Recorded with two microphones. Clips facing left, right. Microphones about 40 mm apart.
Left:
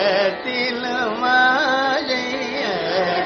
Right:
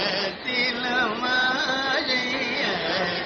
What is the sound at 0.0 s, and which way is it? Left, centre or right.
Music, centre.